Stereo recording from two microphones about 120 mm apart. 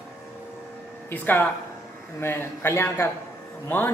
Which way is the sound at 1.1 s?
15° left (ahead or behind).